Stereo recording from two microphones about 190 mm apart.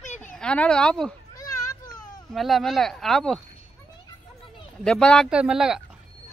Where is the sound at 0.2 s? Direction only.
5° left (ahead or behind).